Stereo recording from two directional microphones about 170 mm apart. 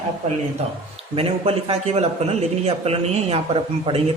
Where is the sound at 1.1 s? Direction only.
30° right (ahead or behind).